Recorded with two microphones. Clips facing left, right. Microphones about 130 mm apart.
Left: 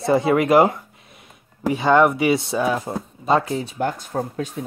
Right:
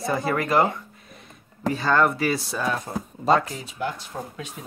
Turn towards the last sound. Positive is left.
turn(degrees=45)  # may be behind; listen again after turning